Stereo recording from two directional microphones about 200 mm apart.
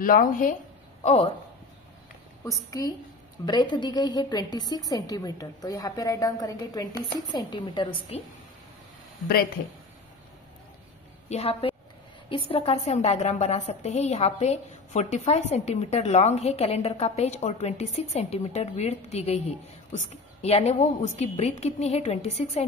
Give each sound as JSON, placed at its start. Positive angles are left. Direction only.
{"t": 0.0, "sound": "speech", "side_deg": 45}
{"t": 1.0, "sound": "speech", "side_deg": 30}
{"t": 2.4, "sound": "a woman's voice", "side_deg": 15}
{"t": 11.2, "sound": "a woman's voice", "side_deg": 30}